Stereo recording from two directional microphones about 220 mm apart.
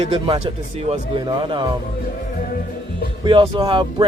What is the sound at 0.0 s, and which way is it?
Speech, 25° right (ahead or behind).